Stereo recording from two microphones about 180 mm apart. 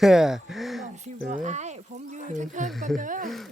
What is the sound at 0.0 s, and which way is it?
Speech, centre (ahead or behind).